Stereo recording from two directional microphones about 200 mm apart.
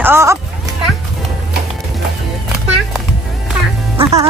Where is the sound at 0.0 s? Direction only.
15° right (ahead or behind).